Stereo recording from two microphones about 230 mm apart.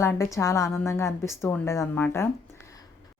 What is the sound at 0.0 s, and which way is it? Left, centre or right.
Speech, centre.